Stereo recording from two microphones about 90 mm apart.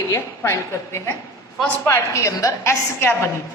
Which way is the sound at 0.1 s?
30° left (ahead or behind).